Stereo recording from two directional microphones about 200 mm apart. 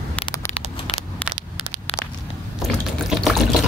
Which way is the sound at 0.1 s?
5° left (ahead or behind).